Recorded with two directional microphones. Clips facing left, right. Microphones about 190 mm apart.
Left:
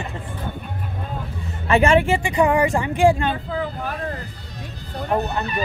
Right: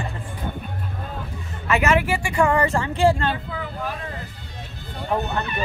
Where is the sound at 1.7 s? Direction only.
30° left (ahead or behind); by 3.3 s 15° left (ahead or behind).